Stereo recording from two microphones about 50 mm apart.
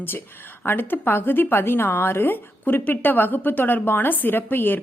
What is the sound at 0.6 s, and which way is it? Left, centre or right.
A woman's voice, left.